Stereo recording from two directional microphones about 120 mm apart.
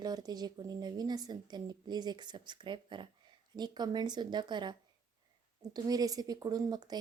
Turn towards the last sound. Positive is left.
turn(degrees=-35)  # may be behind; listen again after turning